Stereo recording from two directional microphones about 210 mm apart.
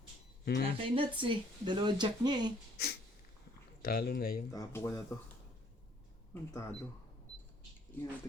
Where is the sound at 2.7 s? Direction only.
50° left (ahead or behind).